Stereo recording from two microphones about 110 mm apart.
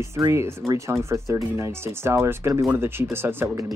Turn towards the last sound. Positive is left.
turn(degrees=-20)  # may be behind; listen again after turning